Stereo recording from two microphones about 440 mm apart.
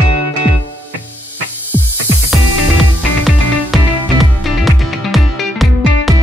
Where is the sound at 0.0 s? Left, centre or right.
Right.